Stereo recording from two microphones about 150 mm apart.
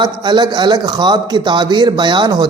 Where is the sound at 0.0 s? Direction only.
30° right (ahead or behind).